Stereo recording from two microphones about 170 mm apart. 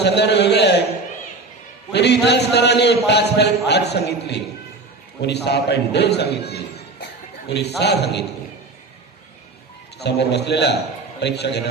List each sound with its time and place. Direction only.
0.0 s a sound: 80° left
1.9 s a man's voice: 85° left
10.0 s a man's voice: 80° left